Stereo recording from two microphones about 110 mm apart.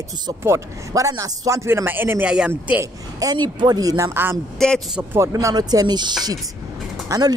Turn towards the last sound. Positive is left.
turn(degrees=-35)  # may be behind; listen again after turning